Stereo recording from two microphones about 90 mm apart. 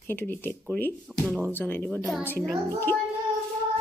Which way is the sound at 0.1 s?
20° left (ahead or behind).